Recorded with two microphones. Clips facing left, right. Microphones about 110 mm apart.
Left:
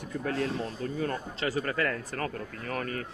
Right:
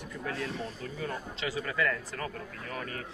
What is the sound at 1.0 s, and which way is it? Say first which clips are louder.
Speech: left 3 dB; 45° left (ahead or behind).